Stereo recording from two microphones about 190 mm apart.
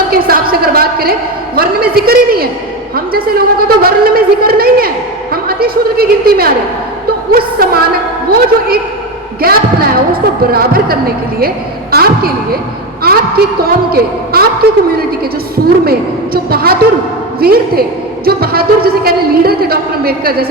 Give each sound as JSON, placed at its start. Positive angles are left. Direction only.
{"t": 0.1, "sound": "a man's voice", "side_deg": -50}
{"t": 13.6, "sound": "a man's voice", "side_deg": -55}